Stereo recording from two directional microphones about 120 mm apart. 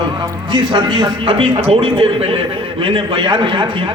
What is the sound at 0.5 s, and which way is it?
A man's voice, 40° right (ahead or behind).